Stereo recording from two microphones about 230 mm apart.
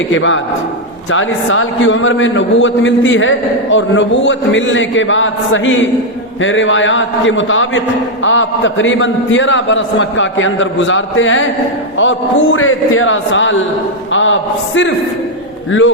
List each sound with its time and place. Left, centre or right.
0.1 s a man's voice: left